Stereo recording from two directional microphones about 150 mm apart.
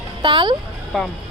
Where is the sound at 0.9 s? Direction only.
Centre (ahead or behind).